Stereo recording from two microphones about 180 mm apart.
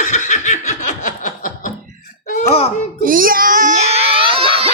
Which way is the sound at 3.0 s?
50° right (ahead or behind).